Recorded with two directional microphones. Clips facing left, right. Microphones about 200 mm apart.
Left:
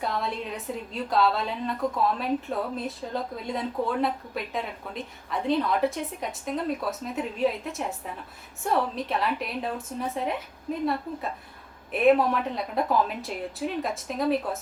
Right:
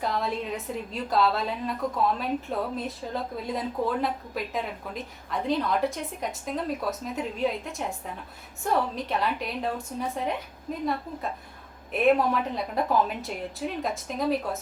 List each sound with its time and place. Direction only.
0.0 s a woman's voice: centre (ahead or behind)
11.9 s a woman's voice: centre (ahead or behind)